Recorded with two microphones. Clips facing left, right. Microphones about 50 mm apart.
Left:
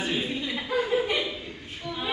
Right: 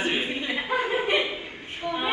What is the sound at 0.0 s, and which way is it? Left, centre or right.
Chuckle, right.